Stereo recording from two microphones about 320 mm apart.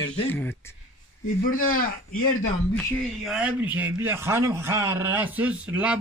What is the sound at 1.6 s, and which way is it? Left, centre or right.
Speech, left.